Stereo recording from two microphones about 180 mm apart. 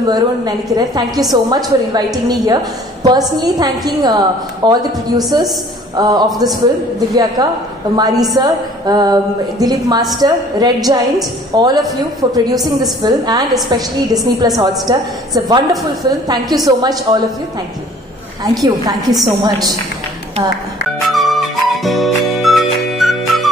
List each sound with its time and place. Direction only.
0.0 s a woman's voice: 20° right (ahead or behind)
6.3 s a man's voice: centre (ahead or behind)
7.4 s a woman's voice: 20° right (ahead or behind)
18.6 s a woman's voice: 20° right (ahead or behind)
21.1 s music: centre (ahead or behind)